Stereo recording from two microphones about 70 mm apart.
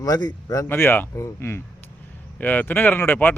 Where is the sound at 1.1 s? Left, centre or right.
Left.